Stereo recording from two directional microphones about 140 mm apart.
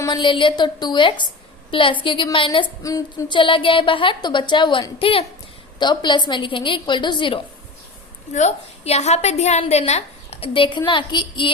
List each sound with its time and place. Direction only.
0.0 s a woman's voice: 35° left (ahead or behind)
2.8 s a sound: 25° left (ahead or behind)
3.3 s a woman's voice: 35° left (ahead or behind)
8.3 s a woman's voice: 55° left (ahead or behind); by 11.5 s 35° left (ahead or behind)